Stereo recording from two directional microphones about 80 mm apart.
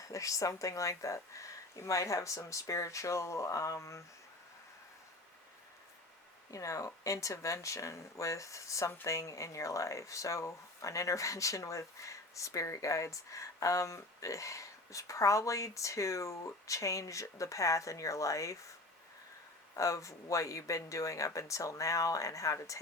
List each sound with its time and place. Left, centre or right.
0.0 s speech: left
6.5 s speech: left
19.7 s speech: left